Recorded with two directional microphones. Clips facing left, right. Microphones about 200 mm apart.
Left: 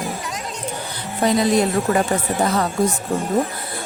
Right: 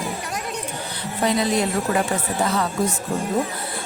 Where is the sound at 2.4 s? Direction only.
40° left (ahead or behind).